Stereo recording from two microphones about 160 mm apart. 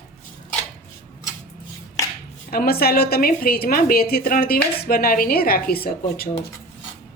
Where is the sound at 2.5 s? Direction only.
70° left (ahead or behind).